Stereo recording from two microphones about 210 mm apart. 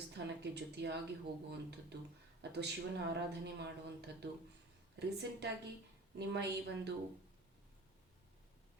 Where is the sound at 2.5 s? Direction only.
55° right (ahead or behind).